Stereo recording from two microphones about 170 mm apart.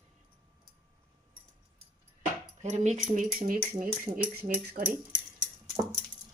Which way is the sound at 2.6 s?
45° right (ahead or behind).